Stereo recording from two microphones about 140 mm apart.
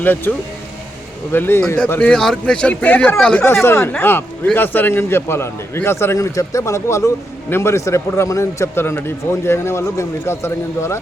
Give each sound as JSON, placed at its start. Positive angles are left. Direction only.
{"t": 0.0, "sound": "a man's voice", "side_deg": 15}
{"t": 3.4, "sound": "a man's voice", "side_deg": 15}